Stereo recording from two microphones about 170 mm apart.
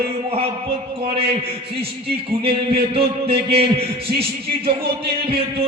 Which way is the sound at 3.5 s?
35° right (ahead or behind).